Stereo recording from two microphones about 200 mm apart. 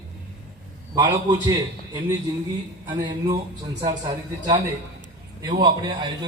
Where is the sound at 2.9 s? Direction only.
20° right (ahead or behind).